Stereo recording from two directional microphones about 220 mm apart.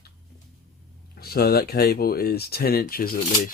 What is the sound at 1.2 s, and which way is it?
Speech, 45° left (ahead or behind).